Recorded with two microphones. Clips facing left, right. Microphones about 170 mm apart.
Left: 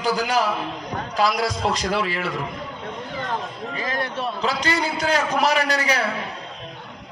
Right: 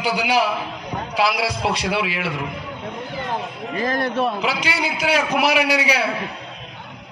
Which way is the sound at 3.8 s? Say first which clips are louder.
Right 6 dB; 50° right (ahead or behind).